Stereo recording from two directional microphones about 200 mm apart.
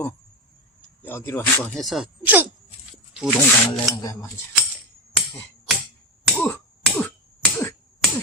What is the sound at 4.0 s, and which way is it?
Speech, 15° left (ahead or behind).